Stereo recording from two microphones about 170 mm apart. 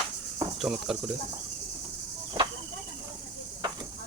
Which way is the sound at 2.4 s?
30° right (ahead or behind).